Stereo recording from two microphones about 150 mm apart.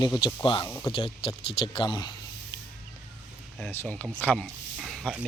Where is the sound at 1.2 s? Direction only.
40° left (ahead or behind).